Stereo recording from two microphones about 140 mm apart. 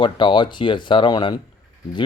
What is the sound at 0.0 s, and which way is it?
Speech, 35° left (ahead or behind).